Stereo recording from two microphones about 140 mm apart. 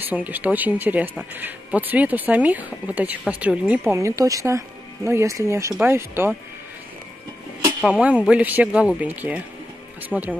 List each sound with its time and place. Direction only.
0.1 s speech: 10° right (ahead or behind)
7.8 s speech: 5° right (ahead or behind)